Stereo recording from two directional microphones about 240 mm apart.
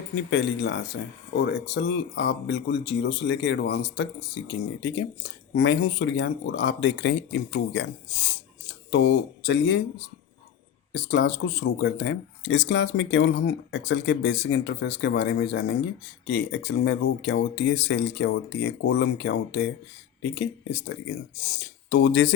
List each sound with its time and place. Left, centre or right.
0.1 s speech: left
10.9 s speech: left